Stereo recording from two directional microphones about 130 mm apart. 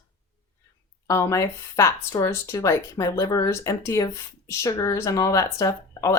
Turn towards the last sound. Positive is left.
turn(degrees=25)  # may be behind; listen again after turning